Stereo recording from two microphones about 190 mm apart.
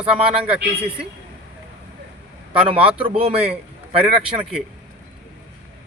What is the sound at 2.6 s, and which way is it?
A man's voice, 30° right (ahead or behind).